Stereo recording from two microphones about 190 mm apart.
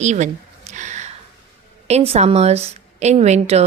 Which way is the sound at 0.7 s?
40° right (ahead or behind).